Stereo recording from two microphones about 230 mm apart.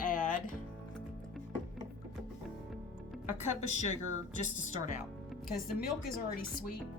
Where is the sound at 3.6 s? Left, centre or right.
Left.